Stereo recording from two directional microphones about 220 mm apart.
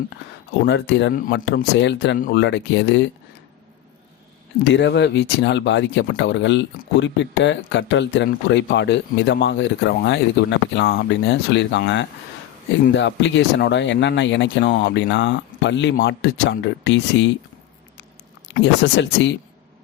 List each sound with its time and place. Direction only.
0.6 s speech: 55° left (ahead or behind)
4.6 s speech: 50° left (ahead or behind)
18.4 s speech: 55° left (ahead or behind)